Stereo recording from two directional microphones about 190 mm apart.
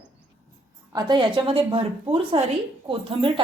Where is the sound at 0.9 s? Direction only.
25° right (ahead or behind).